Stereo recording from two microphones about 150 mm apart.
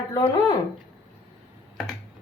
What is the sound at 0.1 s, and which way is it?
Speech, 20° left (ahead or behind).